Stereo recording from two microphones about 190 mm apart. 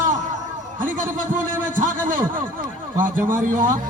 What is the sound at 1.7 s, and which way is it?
Speech, 45° right (ahead or behind).